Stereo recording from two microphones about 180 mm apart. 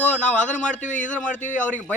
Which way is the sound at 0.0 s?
5° left (ahead or behind).